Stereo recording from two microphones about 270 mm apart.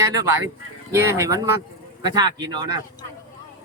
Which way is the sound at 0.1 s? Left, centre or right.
Centre.